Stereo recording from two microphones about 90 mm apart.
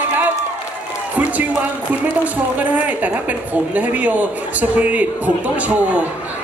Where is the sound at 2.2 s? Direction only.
15° right (ahead or behind).